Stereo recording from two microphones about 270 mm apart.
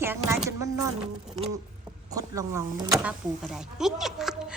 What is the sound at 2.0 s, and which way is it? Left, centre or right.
Speech, centre.